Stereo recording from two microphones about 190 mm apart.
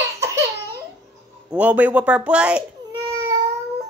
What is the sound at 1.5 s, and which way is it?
Speech, 5° right (ahead or behind).